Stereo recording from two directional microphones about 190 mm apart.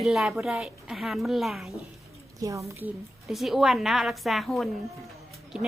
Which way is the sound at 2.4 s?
15° right (ahead or behind).